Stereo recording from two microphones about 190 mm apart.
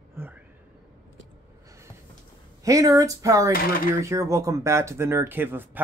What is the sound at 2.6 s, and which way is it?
Speech, 15° right (ahead or behind).